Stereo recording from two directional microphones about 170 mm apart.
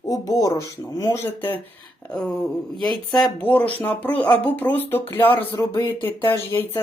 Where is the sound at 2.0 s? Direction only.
5° left (ahead or behind).